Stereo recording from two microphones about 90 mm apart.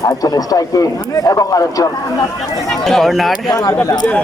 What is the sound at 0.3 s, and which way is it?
Speech, 40° left (ahead or behind).